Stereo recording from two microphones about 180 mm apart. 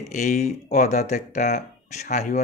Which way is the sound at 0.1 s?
40° left (ahead or behind).